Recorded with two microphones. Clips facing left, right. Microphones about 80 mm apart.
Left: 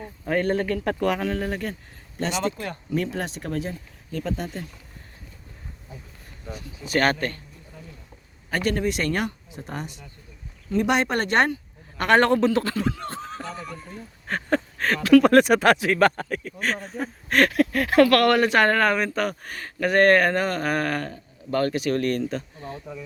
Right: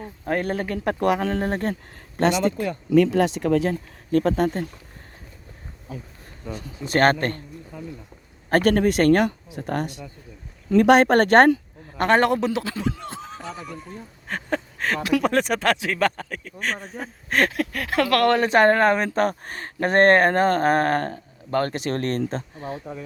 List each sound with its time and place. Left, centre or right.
0.3 s a man's voice: centre
1.2 s speech: right
2.1 s speech: right
2.9 s speech: right
6.9 s speech: right
8.4 s speech: right
11.9 s a man's voice: right; by 12.9 s centre
13.0 s a sound: centre
14.3 s a sound: centre
15.2 s speech: centre
17.2 s a sound: centre
17.6 s speech: centre
18.0 s speech: centre; by 23.0 s right